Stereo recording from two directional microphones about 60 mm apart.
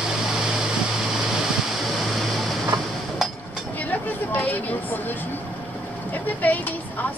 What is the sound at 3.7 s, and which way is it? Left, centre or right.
Vehicle, left.